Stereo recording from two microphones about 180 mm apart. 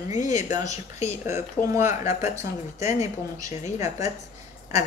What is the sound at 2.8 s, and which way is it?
Speech, 40° left (ahead or behind).